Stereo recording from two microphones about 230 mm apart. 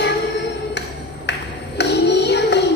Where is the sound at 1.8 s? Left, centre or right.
Left.